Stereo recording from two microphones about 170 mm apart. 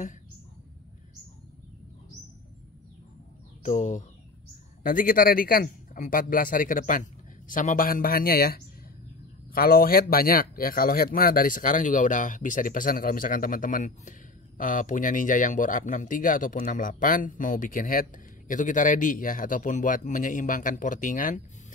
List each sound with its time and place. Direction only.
3.6 s speech: 45° left (ahead or behind)